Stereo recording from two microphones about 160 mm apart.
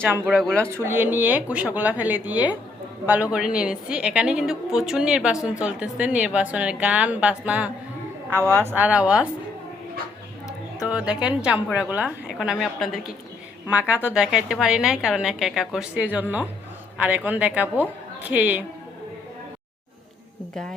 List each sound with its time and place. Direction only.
0.3 s a woman's voice: 5° left (ahead or behind)
0.7 s a woman's voice: 15° right (ahead or behind)
10.8 s a woman's voice: 5° right (ahead or behind)